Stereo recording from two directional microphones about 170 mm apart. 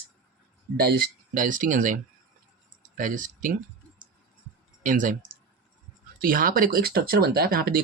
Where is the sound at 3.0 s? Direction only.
50° right (ahead or behind).